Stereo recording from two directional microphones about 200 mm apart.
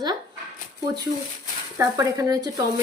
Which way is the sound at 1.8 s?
15° right (ahead or behind).